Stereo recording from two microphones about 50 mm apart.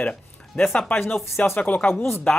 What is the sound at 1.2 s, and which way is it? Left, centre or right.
Speech, left.